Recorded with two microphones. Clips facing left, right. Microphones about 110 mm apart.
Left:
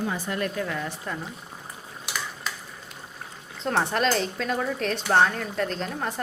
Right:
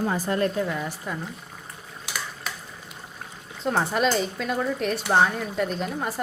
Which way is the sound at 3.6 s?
5° right (ahead or behind).